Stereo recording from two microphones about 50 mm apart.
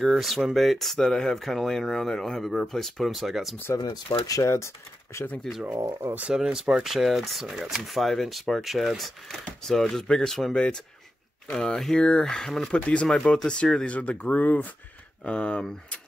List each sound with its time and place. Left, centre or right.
0.0 s speech: centre
3.7 s speech: left
5.7 s speech: right
6.3 s speech: centre
10.5 s speech: centre
12.7 s speech: left
15.2 s speech: left